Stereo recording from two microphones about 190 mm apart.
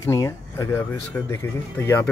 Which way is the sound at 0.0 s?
15° left (ahead or behind).